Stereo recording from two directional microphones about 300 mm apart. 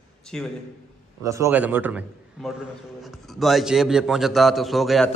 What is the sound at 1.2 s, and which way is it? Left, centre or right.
A man's voice, centre.